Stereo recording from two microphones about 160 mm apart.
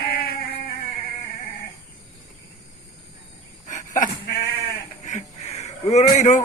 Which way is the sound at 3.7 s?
55° left (ahead or behind).